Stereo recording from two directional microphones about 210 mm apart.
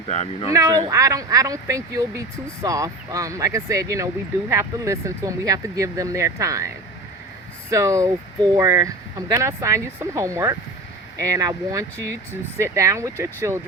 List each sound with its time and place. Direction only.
0.1 s speech: 30° left (ahead or behind)
0.5 s speech: 15° right (ahead or behind)
7.7 s speech: 15° right (ahead or behind)